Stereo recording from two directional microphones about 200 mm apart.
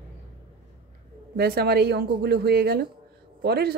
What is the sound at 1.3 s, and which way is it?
A woman's voice, 50° right (ahead or behind).